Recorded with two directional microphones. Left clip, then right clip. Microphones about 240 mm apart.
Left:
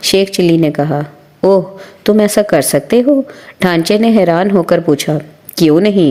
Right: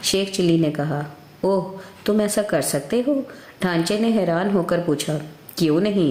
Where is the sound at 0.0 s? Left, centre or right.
Left.